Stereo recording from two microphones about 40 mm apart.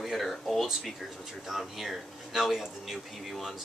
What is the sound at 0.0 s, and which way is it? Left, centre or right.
Speech, centre.